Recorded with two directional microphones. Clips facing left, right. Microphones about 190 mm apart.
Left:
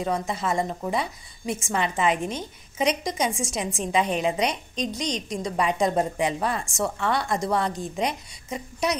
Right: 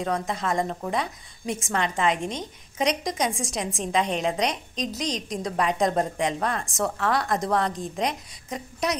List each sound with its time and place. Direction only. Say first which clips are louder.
0.0 s a woman's voice: left 1 dB; 5° left (ahead or behind)